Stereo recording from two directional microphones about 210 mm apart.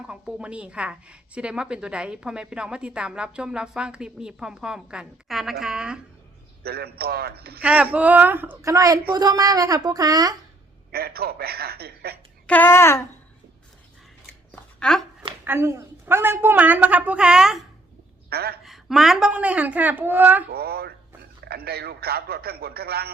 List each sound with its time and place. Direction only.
0.1 s a woman's voice: 5° right (ahead or behind)
6.6 s a man's voice: 50° right (ahead or behind)
7.6 s a woman's voice: 5° right (ahead or behind)
10.9 s a man's voice: 45° right (ahead or behind)
12.5 s a sound: 10° left (ahead or behind)
14.5 s a sound: 5° left (ahead or behind)
15.4 s a woman's voice: 10° right (ahead or behind)
18.3 s a woman's voice: 45° right (ahead or behind)
18.6 s a woman's voice: centre (ahead or behind)
20.5 s a man's voice: 50° right (ahead or behind)